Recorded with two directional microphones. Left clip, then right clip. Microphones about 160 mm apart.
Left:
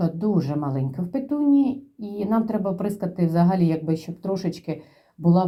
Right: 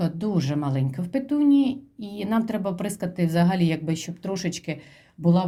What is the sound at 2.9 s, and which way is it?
Speech, 50° right (ahead or behind).